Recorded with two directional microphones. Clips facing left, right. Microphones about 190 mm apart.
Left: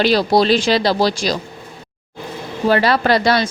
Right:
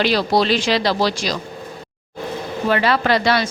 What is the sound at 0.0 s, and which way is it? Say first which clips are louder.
A woman's voice: left 3 dB; 35° left (ahead or behind).